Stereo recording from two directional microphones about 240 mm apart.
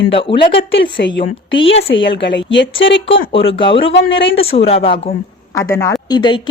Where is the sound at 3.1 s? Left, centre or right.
Left.